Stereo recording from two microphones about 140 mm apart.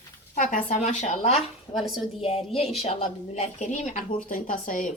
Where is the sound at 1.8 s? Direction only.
Centre (ahead or behind).